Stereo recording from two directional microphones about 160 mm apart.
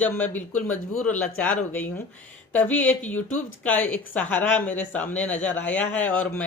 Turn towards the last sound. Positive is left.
turn(degrees=10)  # may be behind; listen again after turning